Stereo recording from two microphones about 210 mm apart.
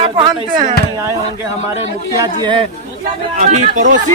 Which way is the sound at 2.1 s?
20° right (ahead or behind).